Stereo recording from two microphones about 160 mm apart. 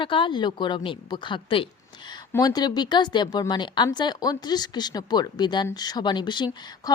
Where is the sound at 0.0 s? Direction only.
30° left (ahead or behind).